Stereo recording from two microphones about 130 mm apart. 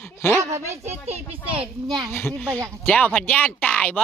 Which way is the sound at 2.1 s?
20° left (ahead or behind).